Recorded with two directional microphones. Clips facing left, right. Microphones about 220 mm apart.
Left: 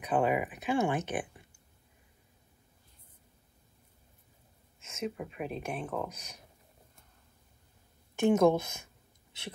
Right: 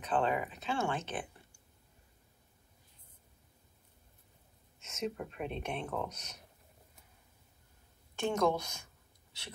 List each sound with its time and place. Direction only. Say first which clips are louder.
0.0 s speech: left 4 dB; 15° left (ahead or behind)
5.0 s speech: left 1 dB; 5° left (ahead or behind)
8.2 s a woman's voice: left 7 dB; 20° left (ahead or behind)